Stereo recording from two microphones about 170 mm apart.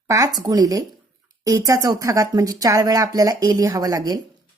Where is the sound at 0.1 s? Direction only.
20° right (ahead or behind).